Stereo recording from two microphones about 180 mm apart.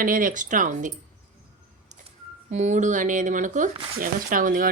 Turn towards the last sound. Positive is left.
turn(degrees=-50)  # may be behind; listen again after turning